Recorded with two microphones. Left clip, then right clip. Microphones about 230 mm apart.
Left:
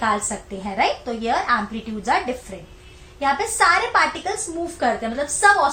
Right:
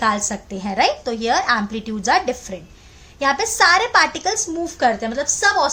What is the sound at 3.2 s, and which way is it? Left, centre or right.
A woman's voice, right.